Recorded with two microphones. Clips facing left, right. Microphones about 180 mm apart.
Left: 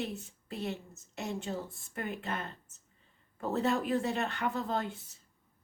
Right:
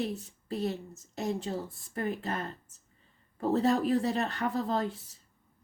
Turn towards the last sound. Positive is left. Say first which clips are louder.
# right 3 dB
turn(degrees=-35)  # may be behind; listen again after turning